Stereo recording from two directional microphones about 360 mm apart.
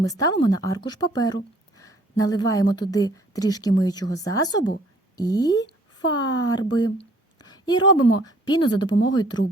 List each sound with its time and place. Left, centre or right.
0.0 s speech: centre
7.3 s a sound: centre
8.2 s speech: centre